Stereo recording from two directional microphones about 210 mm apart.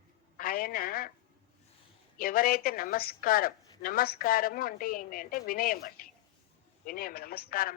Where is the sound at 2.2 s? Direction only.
45° left (ahead or behind).